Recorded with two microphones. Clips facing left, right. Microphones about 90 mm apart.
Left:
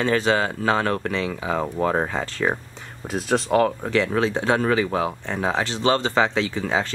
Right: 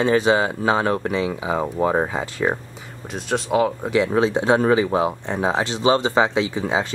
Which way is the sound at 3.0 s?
Centre (ahead or behind).